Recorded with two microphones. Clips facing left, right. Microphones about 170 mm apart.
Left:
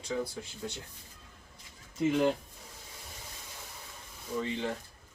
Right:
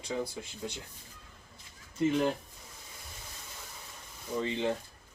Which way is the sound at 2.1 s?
5° left (ahead or behind).